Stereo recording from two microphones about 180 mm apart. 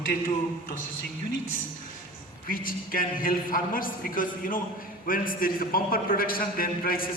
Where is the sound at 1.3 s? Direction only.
90° left.